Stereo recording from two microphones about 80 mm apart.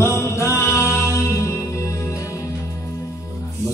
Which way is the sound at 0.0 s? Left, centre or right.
Left.